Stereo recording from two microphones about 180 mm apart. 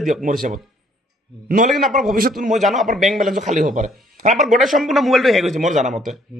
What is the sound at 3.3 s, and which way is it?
Speech, 45° right (ahead or behind).